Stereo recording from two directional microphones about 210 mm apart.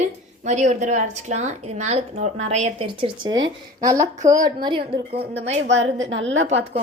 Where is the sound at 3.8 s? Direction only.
15° right (ahead or behind).